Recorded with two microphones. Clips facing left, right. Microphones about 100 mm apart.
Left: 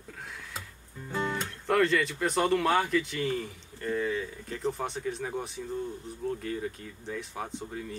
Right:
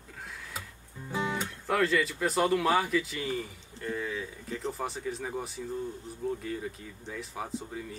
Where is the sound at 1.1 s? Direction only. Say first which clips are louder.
Even; 10° right (ahead or behind).